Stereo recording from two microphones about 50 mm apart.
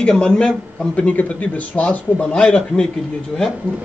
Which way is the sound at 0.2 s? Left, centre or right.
Centre.